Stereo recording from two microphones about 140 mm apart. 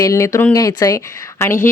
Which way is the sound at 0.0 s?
20° left (ahead or behind).